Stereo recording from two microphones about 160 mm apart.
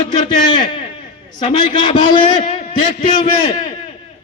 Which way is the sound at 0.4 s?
30° left (ahead or behind).